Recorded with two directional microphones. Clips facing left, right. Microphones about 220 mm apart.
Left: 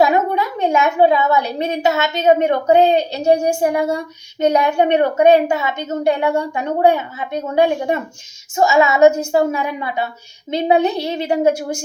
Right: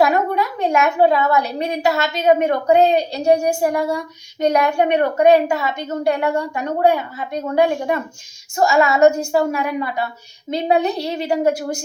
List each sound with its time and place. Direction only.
0.0 s a woman's voice: 20° left (ahead or behind)